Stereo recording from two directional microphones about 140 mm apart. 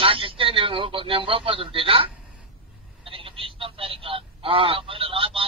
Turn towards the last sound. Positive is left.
turn(degrees=-40)  # may be behind; listen again after turning